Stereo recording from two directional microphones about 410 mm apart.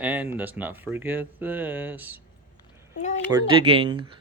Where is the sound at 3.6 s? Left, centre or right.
Centre.